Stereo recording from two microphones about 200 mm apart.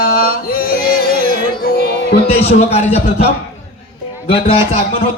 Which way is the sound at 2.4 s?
30° left (ahead or behind).